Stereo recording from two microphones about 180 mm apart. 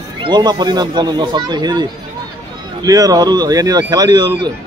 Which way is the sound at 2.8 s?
20° right (ahead or behind).